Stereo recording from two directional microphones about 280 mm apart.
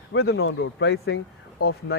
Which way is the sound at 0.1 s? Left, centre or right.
Left.